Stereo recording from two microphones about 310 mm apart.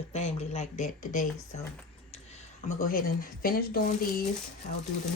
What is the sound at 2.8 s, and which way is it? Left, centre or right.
Speech, left.